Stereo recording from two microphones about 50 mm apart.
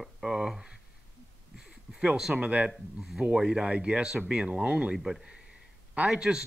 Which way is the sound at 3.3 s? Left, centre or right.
Centre.